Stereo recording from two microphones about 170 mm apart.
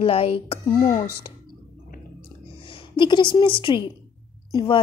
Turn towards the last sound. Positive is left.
turn(degrees=25)  # may be behind; listen again after turning